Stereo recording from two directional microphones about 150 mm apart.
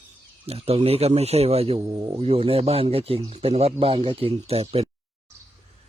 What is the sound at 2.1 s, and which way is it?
Speech, 40° right (ahead or behind).